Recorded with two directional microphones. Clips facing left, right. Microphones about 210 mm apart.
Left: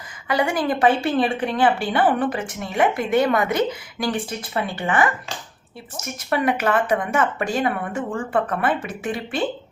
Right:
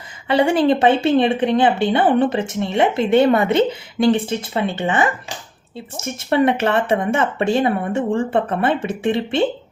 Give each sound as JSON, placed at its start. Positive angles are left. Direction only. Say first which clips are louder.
{"t": 0.3, "sound": "a woman's voice", "louder": "right 6 dB", "side_deg": -25}